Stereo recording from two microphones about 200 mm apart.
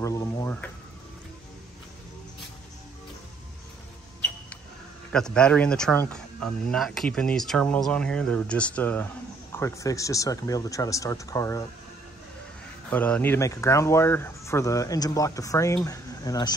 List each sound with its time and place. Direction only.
0.0 s speech: 15° left (ahead or behind)
5.1 s speech: 5° left (ahead or behind)
12.9 s speech: 10° left (ahead or behind)